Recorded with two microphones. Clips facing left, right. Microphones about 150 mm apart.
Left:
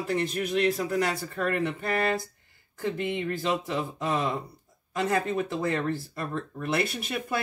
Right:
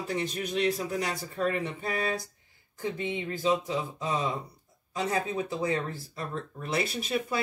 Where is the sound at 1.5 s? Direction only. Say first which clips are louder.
Left 4 dB; 70° left (ahead or behind).